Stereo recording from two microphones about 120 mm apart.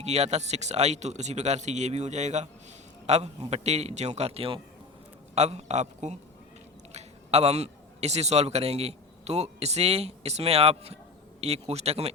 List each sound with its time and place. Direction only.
0.0 s a man's voice: 65° right (ahead or behind)
5.3 s speech: 65° right (ahead or behind)
6.9 s a man's voice: 60° right (ahead or behind)